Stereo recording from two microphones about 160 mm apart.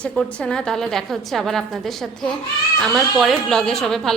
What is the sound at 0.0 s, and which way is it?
Speech, 5° left (ahead or behind).